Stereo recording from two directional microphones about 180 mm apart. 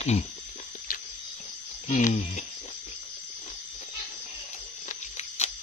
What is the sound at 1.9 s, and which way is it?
Speech, 40° left (ahead or behind).